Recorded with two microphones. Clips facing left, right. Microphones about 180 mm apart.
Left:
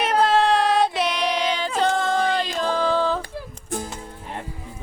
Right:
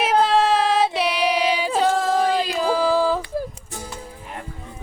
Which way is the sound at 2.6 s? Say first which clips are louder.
Right 3 dB; 10° right (ahead or behind).